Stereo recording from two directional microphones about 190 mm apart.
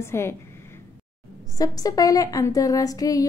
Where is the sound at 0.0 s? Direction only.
15° left (ahead or behind).